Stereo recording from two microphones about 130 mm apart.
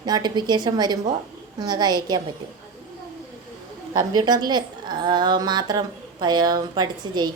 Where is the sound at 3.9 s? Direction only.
30° right (ahead or behind).